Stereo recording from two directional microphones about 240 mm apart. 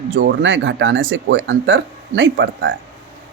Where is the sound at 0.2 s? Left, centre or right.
Right.